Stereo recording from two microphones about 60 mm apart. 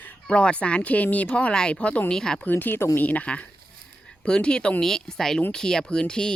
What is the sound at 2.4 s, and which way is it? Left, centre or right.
Speech, left.